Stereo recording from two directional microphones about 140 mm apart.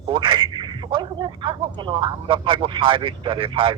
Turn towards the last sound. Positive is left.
turn(degrees=-40)  # may be behind; listen again after turning